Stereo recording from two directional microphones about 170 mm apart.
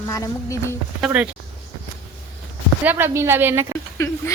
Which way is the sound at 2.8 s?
10° right (ahead or behind).